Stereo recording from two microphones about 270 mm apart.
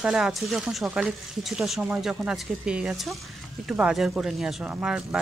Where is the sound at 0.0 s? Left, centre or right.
Centre.